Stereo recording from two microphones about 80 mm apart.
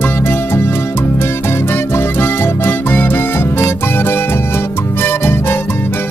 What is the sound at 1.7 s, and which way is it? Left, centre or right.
Music, left.